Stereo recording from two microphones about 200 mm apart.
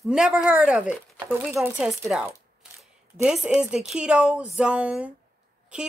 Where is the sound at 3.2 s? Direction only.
5° right (ahead or behind).